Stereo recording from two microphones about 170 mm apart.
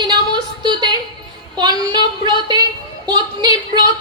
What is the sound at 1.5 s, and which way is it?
A woman's voice, 25° right (ahead or behind).